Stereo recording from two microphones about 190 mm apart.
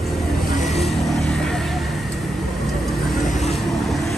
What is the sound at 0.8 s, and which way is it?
Vehicle, centre (ahead or behind).